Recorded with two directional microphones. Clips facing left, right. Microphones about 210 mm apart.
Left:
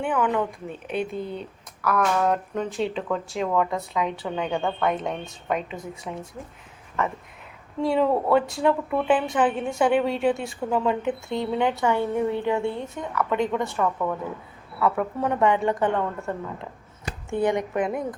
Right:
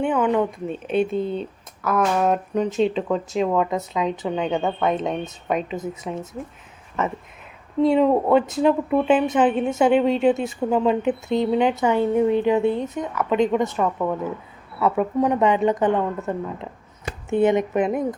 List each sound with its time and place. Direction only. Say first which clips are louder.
0.0 s speech: right 4 dB; 25° right (ahead or behind)